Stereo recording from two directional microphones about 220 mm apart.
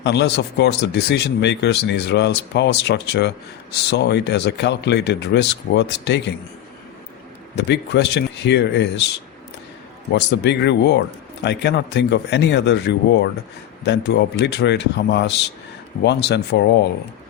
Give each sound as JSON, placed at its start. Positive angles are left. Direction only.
{"t": 0.0, "sound": "speech", "side_deg": 50}
{"t": 7.5, "sound": "speech", "side_deg": 50}
{"t": 10.1, "sound": "speech", "side_deg": 50}